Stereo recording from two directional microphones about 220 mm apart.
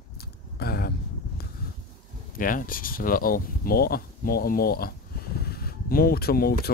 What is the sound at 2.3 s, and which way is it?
Speech, 40° left (ahead or behind).